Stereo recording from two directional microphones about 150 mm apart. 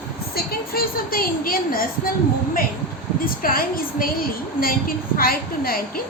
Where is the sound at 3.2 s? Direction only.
75° left (ahead or behind).